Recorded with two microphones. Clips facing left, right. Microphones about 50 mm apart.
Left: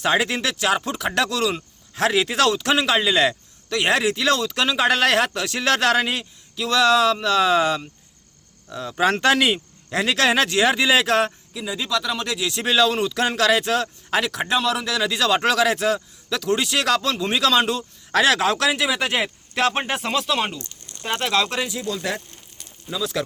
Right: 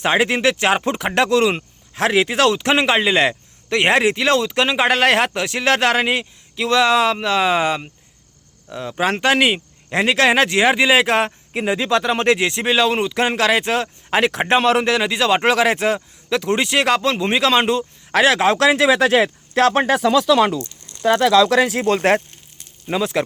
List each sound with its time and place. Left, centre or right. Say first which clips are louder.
0.0 s speech: right 4 dB; right
9.0 s speech: right 1 dB; centre
11.5 s speech: right 10 dB; right
12.5 s speech: right 2 dB; right
14.9 s speech: right 3 dB; right
18.9 s speech: right 8 dB; right
21.5 s speech: right 10 dB; right
23.1 s speech: right 4 dB; right